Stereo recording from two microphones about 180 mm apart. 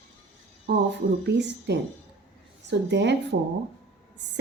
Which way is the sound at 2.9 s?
75° right (ahead or behind).